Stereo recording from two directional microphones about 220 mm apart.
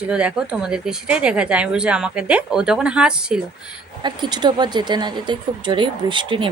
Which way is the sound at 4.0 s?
20° right (ahead or behind).